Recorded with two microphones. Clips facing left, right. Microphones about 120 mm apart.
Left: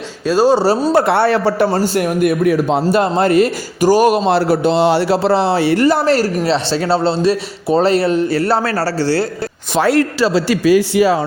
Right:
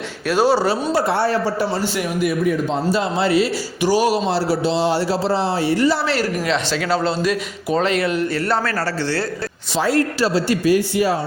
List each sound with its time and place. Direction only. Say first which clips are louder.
0.3 s speech: left 4 dB; 15° left (ahead or behind)
0.9 s a man's voice: left 5 dB; 65° left (ahead or behind); by 9.2 s 35° left (ahead or behind)
9.7 s a man's voice: left 5 dB; 70° left (ahead or behind); by 11.2 s 90° left